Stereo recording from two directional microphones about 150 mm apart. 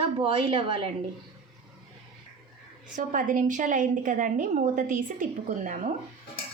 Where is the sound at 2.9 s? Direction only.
60° right (ahead or behind).